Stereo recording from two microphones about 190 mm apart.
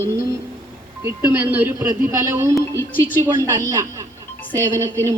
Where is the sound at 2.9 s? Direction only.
10° left (ahead or behind).